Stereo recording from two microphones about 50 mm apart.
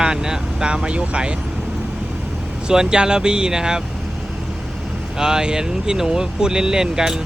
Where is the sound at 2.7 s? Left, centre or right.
Centre.